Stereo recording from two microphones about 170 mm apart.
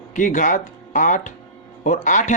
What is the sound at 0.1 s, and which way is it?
Speech, 50° left (ahead or behind).